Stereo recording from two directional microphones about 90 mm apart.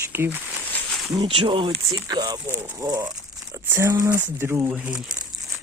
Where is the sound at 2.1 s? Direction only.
50° right (ahead or behind).